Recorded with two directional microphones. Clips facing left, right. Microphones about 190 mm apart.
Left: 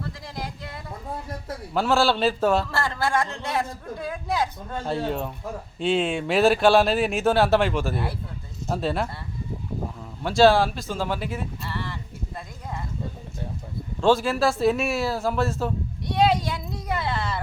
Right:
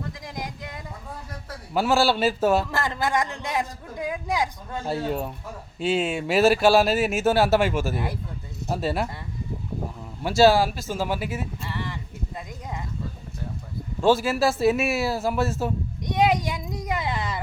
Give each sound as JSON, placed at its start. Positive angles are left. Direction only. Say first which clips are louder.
{"t": 0.0, "sound": "a sound", "louder": "even", "side_deg": -15}
{"t": 1.7, "sound": "a man's voice", "louder": "even", "side_deg": -5}
{"t": 2.7, "sound": "a man's voice", "louder": "even", "side_deg": -15}
{"t": 10.2, "sound": "a man's voice", "louder": "even", "side_deg": -5}
{"t": 11.7, "sound": "a sound", "louder": "even", "side_deg": -15}
{"t": 14.0, "sound": "a man's voice", "louder": "even", "side_deg": -5}